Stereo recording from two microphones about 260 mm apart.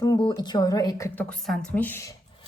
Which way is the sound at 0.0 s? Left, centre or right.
Centre.